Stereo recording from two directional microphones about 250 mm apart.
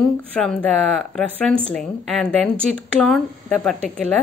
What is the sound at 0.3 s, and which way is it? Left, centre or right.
Speech, centre.